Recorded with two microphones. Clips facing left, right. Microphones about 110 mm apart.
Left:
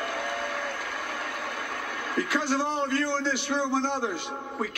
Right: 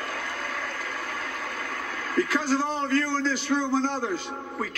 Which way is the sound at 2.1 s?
40° right (ahead or behind).